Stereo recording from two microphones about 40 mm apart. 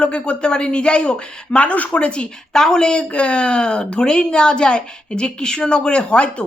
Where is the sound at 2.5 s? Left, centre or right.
Centre.